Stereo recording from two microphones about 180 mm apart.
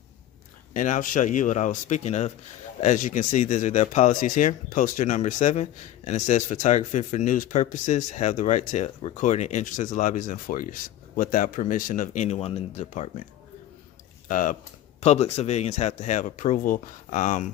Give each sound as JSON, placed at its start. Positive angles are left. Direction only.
{"t": 0.7, "sound": "speech", "side_deg": 45}
{"t": 14.3, "sound": "speech", "side_deg": 45}
{"t": 15.0, "sound": "speech", "side_deg": 35}